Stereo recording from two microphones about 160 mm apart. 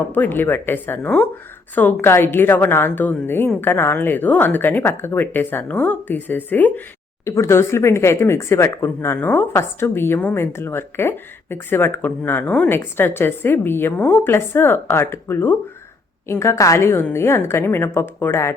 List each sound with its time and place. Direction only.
0.1 s speech: 10° left (ahead or behind)